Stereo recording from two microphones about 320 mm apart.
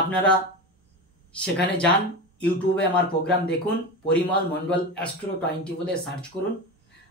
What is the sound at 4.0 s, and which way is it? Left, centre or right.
A man's voice, centre.